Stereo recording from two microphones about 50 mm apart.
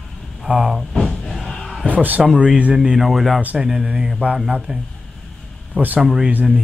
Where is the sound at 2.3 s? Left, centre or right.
Right.